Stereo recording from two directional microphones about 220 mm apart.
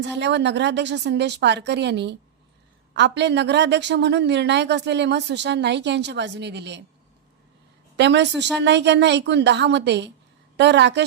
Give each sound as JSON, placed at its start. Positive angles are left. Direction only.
{"t": 0.2, "sound": "a woman's voice", "side_deg": -50}
{"t": 7.9, "sound": "a woman's voice", "side_deg": -50}